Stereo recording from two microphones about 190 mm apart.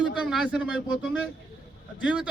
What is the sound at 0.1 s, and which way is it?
Speech, centre (ahead or behind).